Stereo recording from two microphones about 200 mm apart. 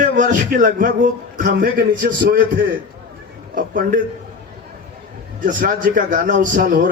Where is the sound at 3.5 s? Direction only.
45° right (ahead or behind).